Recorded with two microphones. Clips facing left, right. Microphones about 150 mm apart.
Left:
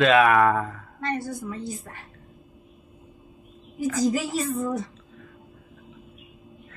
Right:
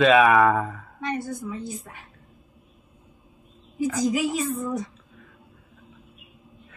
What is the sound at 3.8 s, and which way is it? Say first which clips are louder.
Speech: even; 20° right (ahead or behind).